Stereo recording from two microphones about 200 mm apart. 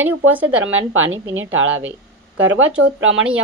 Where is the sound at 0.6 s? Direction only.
75° right (ahead or behind).